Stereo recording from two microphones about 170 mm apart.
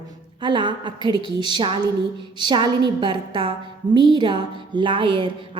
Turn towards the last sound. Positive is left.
turn(degrees=-30)  # may be behind; listen again after turning